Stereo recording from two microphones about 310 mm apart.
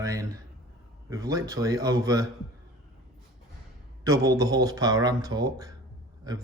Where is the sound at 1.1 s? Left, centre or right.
Centre.